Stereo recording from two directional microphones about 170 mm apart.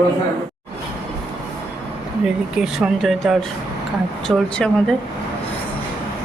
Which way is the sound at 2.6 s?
Centre (ahead or behind).